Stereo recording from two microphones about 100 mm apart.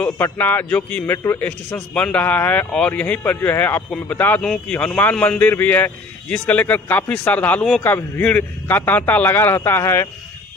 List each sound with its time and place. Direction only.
0.2 s a man's voice: 20° left (ahead or behind)
1.7 s a man's voice: 10° left (ahead or behind)